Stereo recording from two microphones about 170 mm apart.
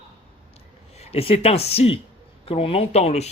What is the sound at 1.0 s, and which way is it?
Speech, 35° left (ahead or behind).